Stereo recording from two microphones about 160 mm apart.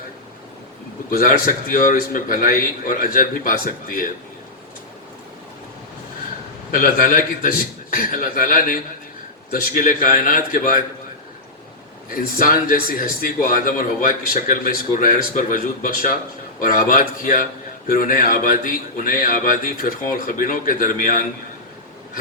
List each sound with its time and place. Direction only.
1.1 s a man's voice: 60° left (ahead or behind)
6.7 s a man's voice: 60° left (ahead or behind)
12.1 s a man's voice: 60° left (ahead or behind)